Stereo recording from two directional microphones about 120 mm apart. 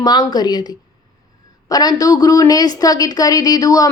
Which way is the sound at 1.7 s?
30° left (ahead or behind).